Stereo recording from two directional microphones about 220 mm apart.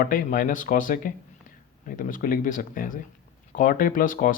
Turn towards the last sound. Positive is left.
turn(degrees=40)  # may be behind; listen again after turning